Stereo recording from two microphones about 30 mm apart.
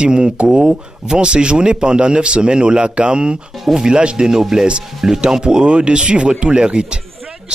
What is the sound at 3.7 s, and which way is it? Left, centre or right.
Speech, right.